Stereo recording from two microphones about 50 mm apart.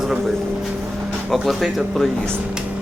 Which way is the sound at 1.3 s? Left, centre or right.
Centre.